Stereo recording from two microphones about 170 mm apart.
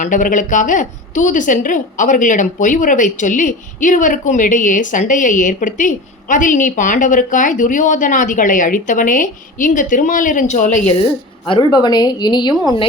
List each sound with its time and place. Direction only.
0.0 s a woman's voice: 50° left (ahead or behind)
11.0 s a woman's voice: 30° left (ahead or behind)